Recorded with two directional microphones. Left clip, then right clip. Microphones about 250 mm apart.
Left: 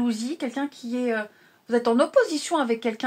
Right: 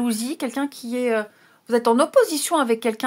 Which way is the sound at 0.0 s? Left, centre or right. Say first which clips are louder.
Right 2 dB; right.